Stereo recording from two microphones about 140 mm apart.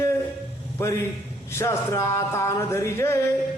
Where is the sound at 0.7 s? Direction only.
20° left (ahead or behind).